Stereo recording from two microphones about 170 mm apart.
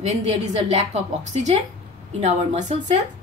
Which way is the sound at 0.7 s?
40° right (ahead or behind).